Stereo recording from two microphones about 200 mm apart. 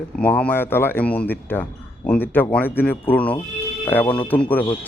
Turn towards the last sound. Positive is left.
turn(degrees=10)  # may be behind; listen again after turning